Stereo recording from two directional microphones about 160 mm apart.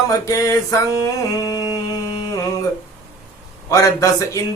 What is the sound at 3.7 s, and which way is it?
Speech, 20° left (ahead or behind).